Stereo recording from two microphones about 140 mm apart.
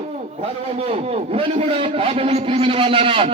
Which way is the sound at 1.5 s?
45° right (ahead or behind).